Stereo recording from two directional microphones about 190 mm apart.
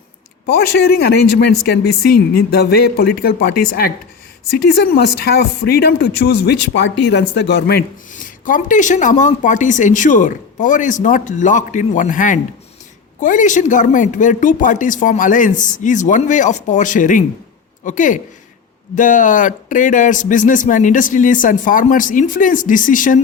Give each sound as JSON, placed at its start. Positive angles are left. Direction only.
{"t": 0.9, "sound": "speech", "side_deg": 60}
{"t": 8.1, "sound": "speech", "side_deg": 45}